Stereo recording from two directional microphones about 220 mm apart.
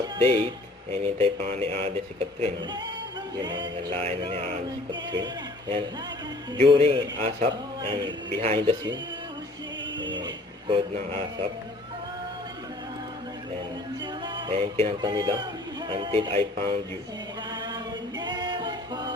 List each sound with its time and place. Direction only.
0.0 s music: 25° right (ahead or behind)
10.0 s a sound: 55° right (ahead or behind)
10.2 s a sound: 25° right (ahead or behind)
14.0 s music: 20° right (ahead or behind)
17.5 s chant: 20° right (ahead or behind)
18.2 s music: 20° right (ahead or behind)